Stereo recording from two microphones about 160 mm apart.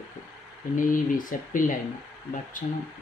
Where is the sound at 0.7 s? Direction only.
55° left (ahead or behind).